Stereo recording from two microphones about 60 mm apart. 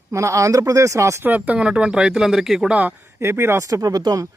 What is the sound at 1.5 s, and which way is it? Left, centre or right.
Speech, centre.